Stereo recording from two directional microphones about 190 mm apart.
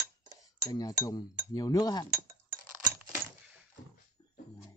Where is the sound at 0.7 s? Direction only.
20° left (ahead or behind).